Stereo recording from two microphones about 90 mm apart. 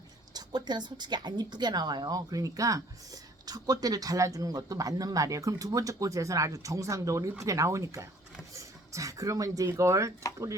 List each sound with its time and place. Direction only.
0.3 s a woman's voice: 55° right (ahead or behind); by 10.1 s 35° right (ahead or behind)